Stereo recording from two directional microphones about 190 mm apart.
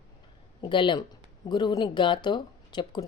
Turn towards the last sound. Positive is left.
turn(degrees=25)  # may be behind; listen again after turning